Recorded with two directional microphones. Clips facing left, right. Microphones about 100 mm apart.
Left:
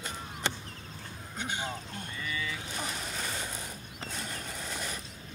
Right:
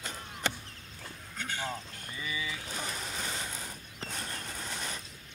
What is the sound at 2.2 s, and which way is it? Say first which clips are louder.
Speech: even; 15° right (ahead or behind).